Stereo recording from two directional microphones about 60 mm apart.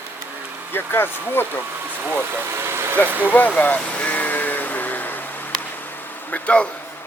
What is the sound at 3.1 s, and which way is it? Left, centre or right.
Speech, right.